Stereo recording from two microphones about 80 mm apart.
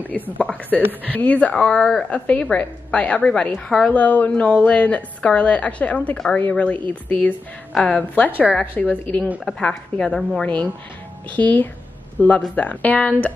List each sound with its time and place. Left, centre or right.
0.0 s a woman's voice: centre